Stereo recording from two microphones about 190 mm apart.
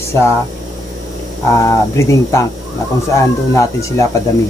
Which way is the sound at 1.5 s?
15° left (ahead or behind).